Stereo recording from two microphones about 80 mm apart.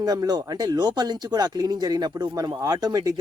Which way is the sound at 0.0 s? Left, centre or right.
Right.